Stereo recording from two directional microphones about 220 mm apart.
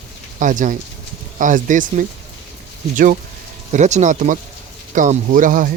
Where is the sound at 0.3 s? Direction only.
35° right (ahead or behind).